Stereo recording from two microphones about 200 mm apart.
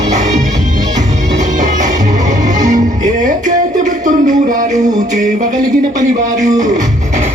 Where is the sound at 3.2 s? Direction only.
40° right (ahead or behind).